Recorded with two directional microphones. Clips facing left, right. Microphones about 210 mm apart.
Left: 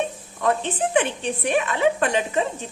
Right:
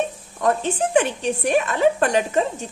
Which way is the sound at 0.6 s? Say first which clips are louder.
Right 2 dB; 40° right (ahead or behind).